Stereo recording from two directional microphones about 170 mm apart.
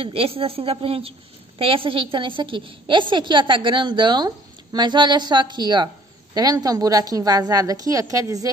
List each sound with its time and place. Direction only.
0.0 s a woman's voice: 35° right (ahead or behind)